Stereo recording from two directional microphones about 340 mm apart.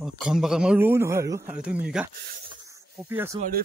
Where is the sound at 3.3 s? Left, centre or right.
Right.